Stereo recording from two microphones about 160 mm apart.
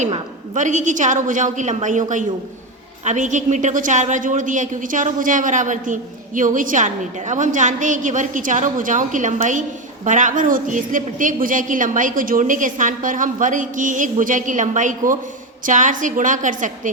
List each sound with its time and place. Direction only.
0.5 s a woman's voice: 50° right (ahead or behind)